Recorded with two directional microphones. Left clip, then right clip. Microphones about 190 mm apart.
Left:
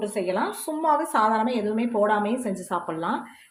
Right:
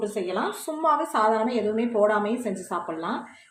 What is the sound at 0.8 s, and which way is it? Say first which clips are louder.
Speech: even; 30° left (ahead or behind).